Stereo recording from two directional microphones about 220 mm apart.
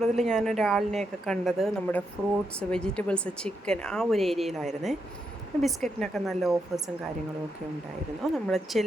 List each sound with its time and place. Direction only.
0.0 s a woman's voice: centre (ahead or behind)
6.5 s speech: 15° right (ahead or behind)
8.2 s a woman's voice: centre (ahead or behind)